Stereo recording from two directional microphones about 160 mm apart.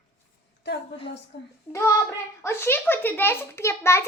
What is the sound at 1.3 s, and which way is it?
Speech, 90° left.